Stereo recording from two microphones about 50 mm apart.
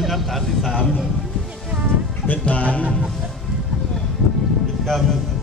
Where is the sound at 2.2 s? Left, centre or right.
Left.